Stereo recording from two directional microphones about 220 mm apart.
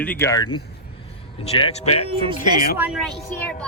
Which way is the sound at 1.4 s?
30° left (ahead or behind).